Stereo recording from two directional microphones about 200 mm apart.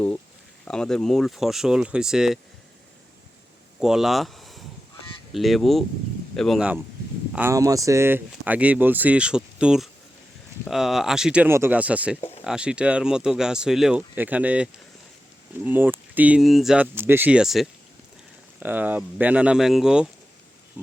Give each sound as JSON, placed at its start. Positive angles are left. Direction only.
{"t": 0.6, "sound": "speech", "side_deg": 5}
{"t": 3.8, "sound": "speech", "side_deg": -5}
{"t": 7.3, "sound": "speech", "side_deg": -15}
{"t": 20.8, "sound": "pig", "side_deg": -5}